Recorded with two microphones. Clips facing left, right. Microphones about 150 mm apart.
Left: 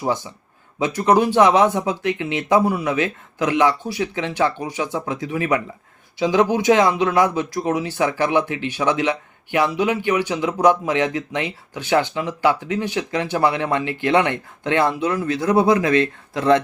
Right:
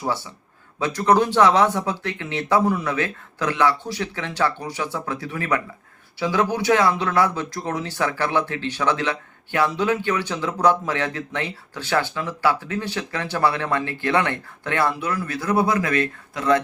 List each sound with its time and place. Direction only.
0.0 s speech: 20° left (ahead or behind)